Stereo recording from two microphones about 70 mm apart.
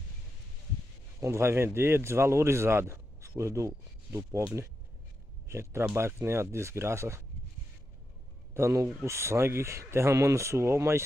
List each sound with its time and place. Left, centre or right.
1.2 s speech: right
5.5 s speech: right
8.5 s speech: right